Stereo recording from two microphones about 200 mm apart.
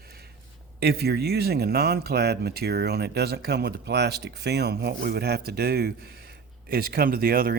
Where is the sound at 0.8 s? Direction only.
55° right (ahead or behind).